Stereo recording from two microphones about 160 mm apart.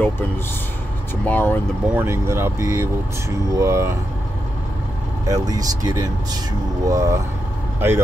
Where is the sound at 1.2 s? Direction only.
10° left (ahead or behind).